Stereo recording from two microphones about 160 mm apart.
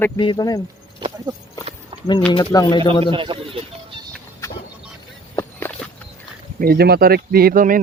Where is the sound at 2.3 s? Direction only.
30° left (ahead or behind).